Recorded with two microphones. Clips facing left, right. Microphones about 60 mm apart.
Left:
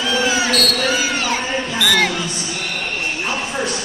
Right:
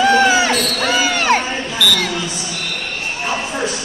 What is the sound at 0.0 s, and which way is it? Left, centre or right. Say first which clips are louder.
Basketball bounce: right 6 dB; right.